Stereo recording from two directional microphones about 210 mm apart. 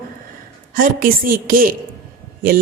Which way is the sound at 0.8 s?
40° right (ahead or behind).